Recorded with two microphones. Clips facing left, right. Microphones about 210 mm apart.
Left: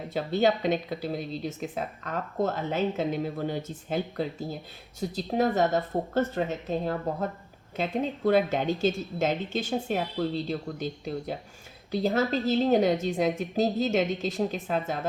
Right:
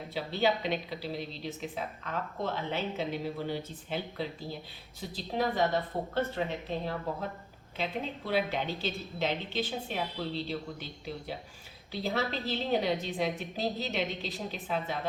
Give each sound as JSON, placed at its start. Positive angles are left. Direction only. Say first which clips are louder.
{"t": 0.1, "sound": "speech", "louder": "left 5 dB", "side_deg": 45}